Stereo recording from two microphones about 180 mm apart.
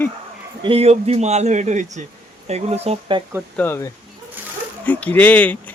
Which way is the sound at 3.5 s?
15° left (ahead or behind).